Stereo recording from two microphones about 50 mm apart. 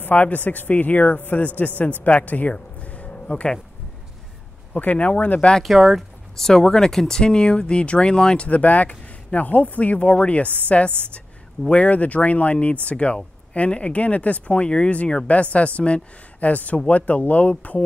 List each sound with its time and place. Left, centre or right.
0.0 s speech: left
2.5 s a sound: left
4.7 s speech: left
5.6 s speech: centre
6.3 s speech: centre
8.5 s speech: left